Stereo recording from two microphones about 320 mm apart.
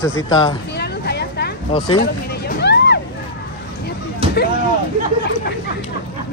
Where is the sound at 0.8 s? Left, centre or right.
Left.